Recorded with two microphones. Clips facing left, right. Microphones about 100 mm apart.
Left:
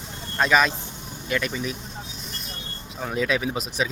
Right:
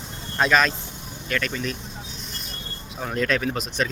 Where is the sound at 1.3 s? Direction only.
15° left (ahead or behind).